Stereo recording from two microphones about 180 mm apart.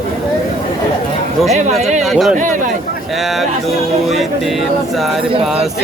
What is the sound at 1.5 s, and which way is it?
Speech, 40° right (ahead or behind).